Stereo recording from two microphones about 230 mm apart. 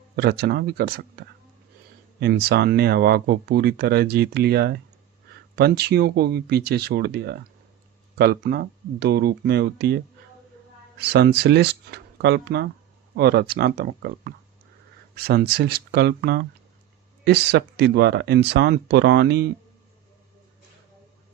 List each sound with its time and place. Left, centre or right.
0.2 s speech: right
2.2 s speech: right